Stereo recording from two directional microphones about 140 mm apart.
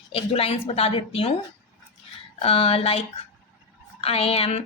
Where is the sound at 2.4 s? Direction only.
45° left (ahead or behind).